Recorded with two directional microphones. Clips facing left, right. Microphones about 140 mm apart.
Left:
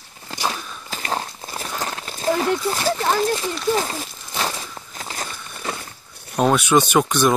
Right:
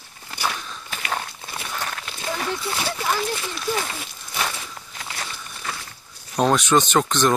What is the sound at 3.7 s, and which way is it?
Walk, 35° left (ahead or behind).